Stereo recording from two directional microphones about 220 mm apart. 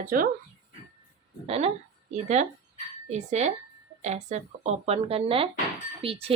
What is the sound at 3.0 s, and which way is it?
A woman's voice, 30° right (ahead or behind).